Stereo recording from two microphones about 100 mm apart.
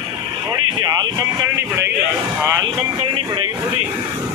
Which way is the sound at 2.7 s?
55° right (ahead or behind).